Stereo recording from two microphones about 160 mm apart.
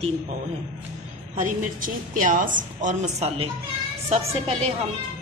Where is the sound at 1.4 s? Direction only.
55° right (ahead or behind); by 4.5 s 40° right (ahead or behind).